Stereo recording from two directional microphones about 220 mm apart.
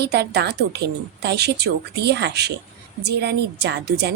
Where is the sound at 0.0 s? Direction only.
50° right (ahead or behind).